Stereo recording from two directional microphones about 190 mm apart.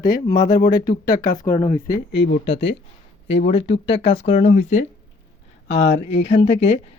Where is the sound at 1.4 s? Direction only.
15° left (ahead or behind).